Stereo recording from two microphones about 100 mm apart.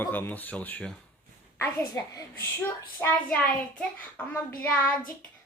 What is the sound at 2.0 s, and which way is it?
Speech, 30° left (ahead or behind).